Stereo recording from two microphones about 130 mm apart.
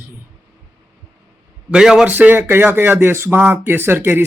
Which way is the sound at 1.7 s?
5° right (ahead or behind).